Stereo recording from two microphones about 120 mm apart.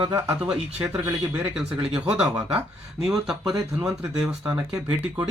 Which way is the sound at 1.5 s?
5° right (ahead or behind).